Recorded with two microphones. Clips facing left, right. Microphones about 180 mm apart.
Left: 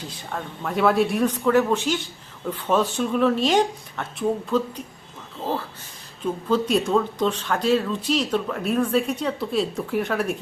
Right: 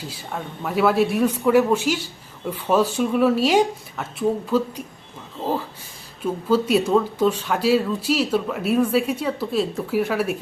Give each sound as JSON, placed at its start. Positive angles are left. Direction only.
{"t": 0.1, "sound": "speech", "side_deg": -5}